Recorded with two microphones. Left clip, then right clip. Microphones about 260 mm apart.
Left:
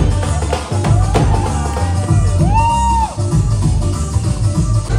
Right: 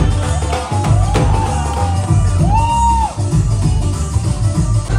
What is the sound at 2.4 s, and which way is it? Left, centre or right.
Music, right.